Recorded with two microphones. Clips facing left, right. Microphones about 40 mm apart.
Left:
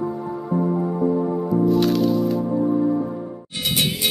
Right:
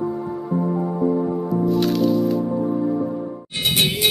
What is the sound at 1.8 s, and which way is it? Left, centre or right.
Music, centre.